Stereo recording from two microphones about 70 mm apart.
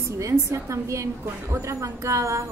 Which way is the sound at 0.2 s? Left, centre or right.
Right.